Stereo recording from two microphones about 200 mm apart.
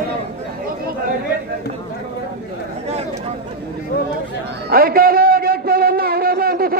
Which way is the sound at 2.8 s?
30° right (ahead or behind).